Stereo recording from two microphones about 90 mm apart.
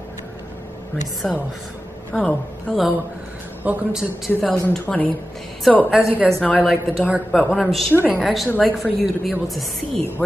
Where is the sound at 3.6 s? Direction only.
15° right (ahead or behind).